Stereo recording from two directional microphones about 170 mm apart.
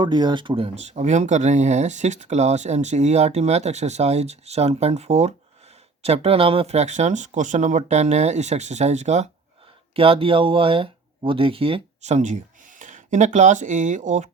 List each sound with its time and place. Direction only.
0.0 s speech: 25° right (ahead or behind); by 14.3 s 45° right (ahead or behind)